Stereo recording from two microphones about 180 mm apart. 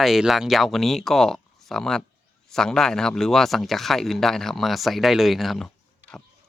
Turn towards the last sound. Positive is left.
turn(degrees=0)  # may be behind; listen again after turning